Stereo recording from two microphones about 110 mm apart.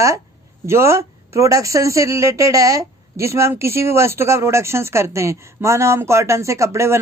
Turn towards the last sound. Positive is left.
turn(degrees=-25)  # may be behind; listen again after turning